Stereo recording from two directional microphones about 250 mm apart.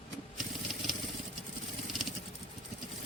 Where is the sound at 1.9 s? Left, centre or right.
Centre.